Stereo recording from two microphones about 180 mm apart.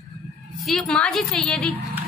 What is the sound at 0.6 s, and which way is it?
A woman's voice, 5° left (ahead or behind).